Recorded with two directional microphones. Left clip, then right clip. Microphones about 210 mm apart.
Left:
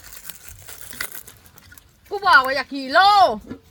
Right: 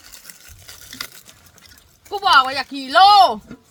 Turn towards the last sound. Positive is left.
turn(degrees=5)  # may be behind; listen again after turning